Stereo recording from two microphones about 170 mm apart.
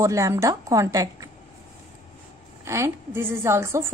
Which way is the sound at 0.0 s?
20° right (ahead or behind).